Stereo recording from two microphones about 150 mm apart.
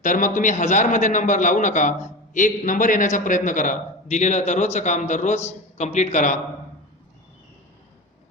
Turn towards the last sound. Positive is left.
turn(degrees=55)  # may be behind; listen again after turning